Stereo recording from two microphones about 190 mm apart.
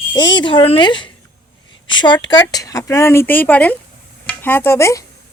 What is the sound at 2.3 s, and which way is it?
A woman's voice, 20° left (ahead or behind).